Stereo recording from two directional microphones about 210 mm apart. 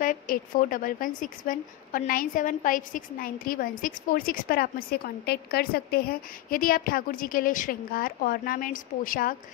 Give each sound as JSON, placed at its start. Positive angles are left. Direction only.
{"t": 0.0, "sound": "a woman's voice", "side_deg": 40}